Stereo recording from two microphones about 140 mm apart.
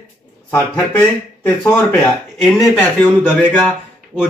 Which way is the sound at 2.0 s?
Centre (ahead or behind).